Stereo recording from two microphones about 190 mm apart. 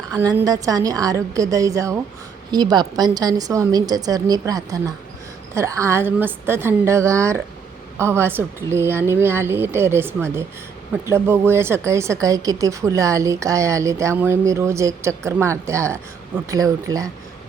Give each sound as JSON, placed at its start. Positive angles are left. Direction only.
{"t": 0.1, "sound": "a woman's voice", "side_deg": -15}